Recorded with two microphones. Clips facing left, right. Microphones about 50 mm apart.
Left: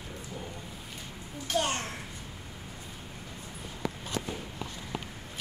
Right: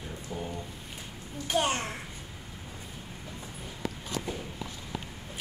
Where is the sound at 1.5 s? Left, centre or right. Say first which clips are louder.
Right 2 dB; centre.